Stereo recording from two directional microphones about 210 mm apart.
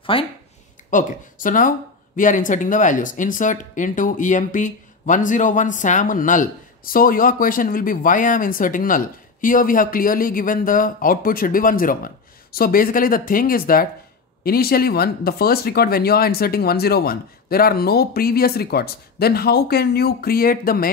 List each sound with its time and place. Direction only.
0.1 s speech: 25° left (ahead or behind)
0.8 s speech: 40° left (ahead or behind)